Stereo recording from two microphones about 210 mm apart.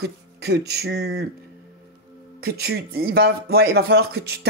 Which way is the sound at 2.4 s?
50° right (ahead or behind).